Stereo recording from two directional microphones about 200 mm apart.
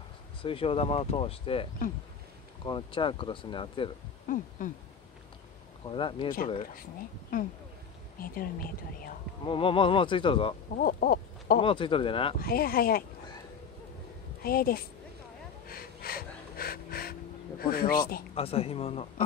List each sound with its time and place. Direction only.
0.4 s speech: 25° left (ahead or behind)
4.3 s a sound: 40° left (ahead or behind)
5.9 s speech: 25° left (ahead or behind)
7.3 s speech: 45° left (ahead or behind)
9.5 s speech: 25° left (ahead or behind)
10.8 s owl: 45° left (ahead or behind)
11.6 s speech: 25° left (ahead or behind)
12.4 s speech: 50° left (ahead or behind)
14.4 s speech: 50° left (ahead or behind)
15.6 s a sound: 50° left (ahead or behind)
18.3 s speech: 30° left (ahead or behind)